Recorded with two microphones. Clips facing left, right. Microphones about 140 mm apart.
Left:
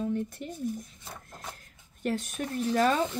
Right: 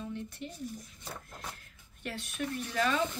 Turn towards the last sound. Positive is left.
turn(degrees=40)  # may be behind; listen again after turning